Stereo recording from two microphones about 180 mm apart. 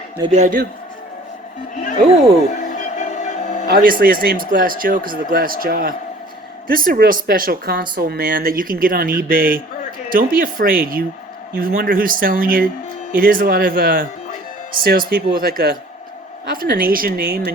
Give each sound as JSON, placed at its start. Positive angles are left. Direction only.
{"t": 0.3, "sound": "speech", "side_deg": -40}
{"t": 2.6, "sound": "music", "side_deg": 40}
{"t": 3.7, "sound": "speech", "side_deg": -50}